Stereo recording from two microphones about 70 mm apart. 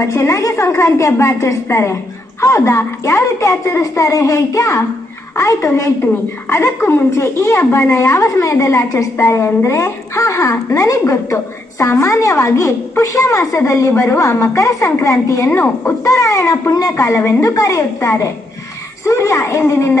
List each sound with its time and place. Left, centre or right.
0.0 s a woman's voice: left
19.6 s music: left